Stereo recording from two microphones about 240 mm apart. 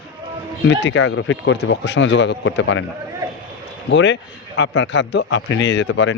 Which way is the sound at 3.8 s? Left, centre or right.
Left.